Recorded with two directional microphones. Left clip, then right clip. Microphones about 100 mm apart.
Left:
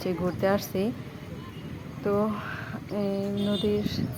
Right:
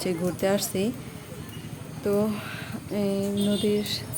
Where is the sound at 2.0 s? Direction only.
5° right (ahead or behind).